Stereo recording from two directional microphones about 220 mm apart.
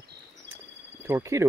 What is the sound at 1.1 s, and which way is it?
Speech, 15° right (ahead or behind).